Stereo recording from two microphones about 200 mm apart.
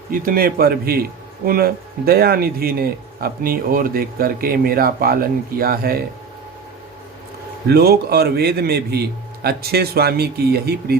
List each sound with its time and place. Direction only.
0.1 s a man's voice: 45° right (ahead or behind)
7.7 s a man's voice: 50° right (ahead or behind)